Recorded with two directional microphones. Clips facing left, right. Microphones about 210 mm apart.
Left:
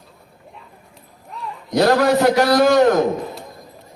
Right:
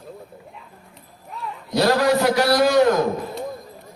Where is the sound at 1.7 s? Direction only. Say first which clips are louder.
Left 3 dB; 50° left (ahead or behind).